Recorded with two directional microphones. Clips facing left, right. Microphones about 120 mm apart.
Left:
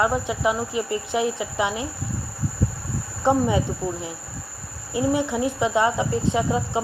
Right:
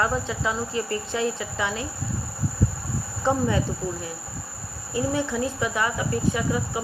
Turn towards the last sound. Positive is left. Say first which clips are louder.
# left 3 dB
turn(degrees=25)  # may be behind; listen again after turning